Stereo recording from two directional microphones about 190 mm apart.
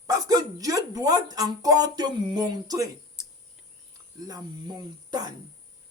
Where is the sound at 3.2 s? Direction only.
5° right (ahead or behind).